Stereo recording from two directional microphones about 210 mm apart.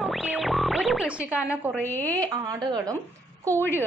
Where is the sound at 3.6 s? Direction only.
10° left (ahead or behind).